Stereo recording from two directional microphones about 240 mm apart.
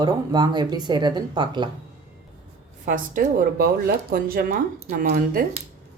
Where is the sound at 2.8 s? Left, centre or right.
Right.